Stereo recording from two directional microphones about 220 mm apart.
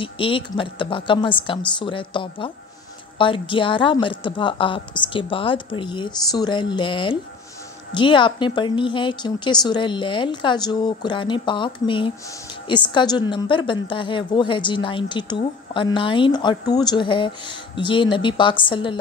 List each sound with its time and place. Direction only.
0.0 s a woman's voice: 25° left (ahead or behind)